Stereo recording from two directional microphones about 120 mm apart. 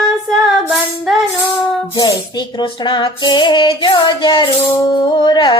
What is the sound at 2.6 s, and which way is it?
Music, 40° left (ahead or behind).